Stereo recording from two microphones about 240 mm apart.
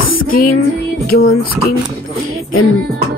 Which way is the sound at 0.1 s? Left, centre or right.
Left.